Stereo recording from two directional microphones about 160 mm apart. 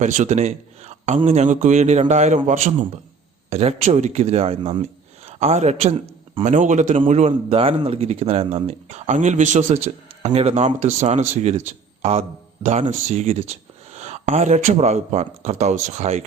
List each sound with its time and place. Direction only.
0.0 s a man's voice: 50° right (ahead or behind)
12.6 s speech: 50° right (ahead or behind)